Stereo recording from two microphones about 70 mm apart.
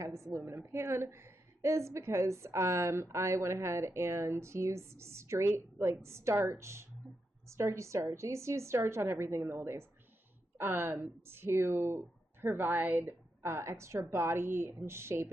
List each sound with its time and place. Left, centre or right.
0.0 s a woman's voice: right
13.4 s a woman's voice: right